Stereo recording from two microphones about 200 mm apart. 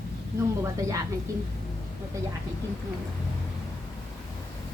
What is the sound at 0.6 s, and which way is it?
Speech, 15° right (ahead or behind).